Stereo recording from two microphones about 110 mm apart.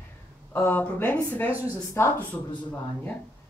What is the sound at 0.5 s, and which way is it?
Speech, 20° left (ahead or behind).